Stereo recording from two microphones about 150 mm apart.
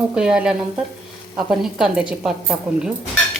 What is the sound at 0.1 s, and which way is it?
Speech, 5° right (ahead or behind).